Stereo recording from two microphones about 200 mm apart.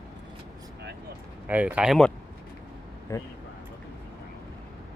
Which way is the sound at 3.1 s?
15° left (ahead or behind).